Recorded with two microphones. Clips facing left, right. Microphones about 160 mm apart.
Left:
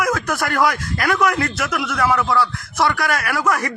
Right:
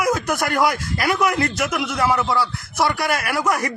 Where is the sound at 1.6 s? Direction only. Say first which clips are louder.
Even; 15° right (ahead or behind).